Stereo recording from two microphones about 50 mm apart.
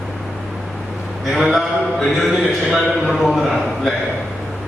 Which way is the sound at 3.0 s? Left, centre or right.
Centre.